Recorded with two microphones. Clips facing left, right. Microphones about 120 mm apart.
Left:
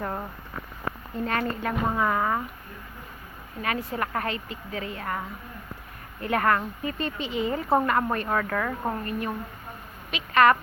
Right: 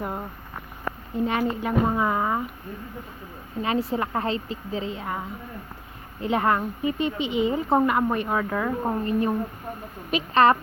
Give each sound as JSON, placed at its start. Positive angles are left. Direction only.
{"t": 0.0, "sound": "a sound", "side_deg": -10}
{"t": 1.1, "sound": "a woman's voice", "side_deg": -15}
{"t": 3.6, "sound": "a woman's voice", "side_deg": -25}